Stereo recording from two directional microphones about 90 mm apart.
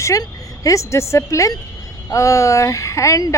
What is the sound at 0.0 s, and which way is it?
A woman's voice, 35° left (ahead or behind).